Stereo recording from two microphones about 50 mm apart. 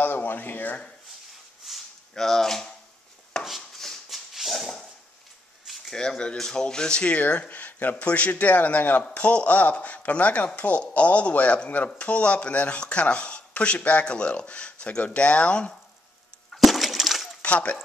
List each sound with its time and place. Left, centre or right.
0.0 s a sound: left
1.6 s a sound: centre
2.1 s speech: centre
3.3 s chopping: centre
3.7 s dog: centre
5.7 s a sound: centre
5.9 s speech: centre
16.5 s breaking: centre
17.4 s speech: left